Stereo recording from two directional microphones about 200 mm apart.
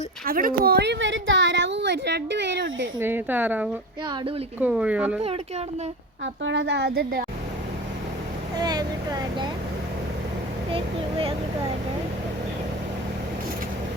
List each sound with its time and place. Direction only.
0.3 s a woman's voice: 45° right (ahead or behind); by 2.9 s 65° right (ahead or behind)
3.0 s speech: 10° right (ahead or behind)
5.2 s speech: 30° right (ahead or behind)
6.4 s a woman's voice: 65° right (ahead or behind)
8.5 s speech: 20° right (ahead or behind)
10.7 s speech: 25° right (ahead or behind)